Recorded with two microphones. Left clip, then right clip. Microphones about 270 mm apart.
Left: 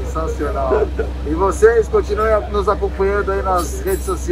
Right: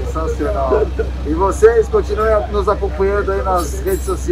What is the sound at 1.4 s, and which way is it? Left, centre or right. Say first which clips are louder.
Speech: right 1 dB; centre.